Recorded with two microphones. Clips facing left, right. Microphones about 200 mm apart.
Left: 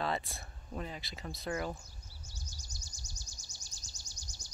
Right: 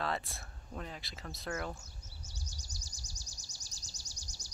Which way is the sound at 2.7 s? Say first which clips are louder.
Even; 35° right (ahead or behind).